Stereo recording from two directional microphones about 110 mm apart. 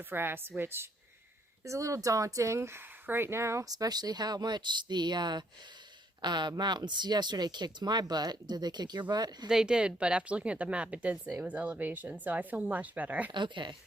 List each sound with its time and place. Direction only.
0.0 s a woman's voice: 20° right (ahead or behind); by 9.5 s 40° right (ahead or behind)
9.5 s speech: 5° right (ahead or behind)
13.3 s speech: 45° right (ahead or behind)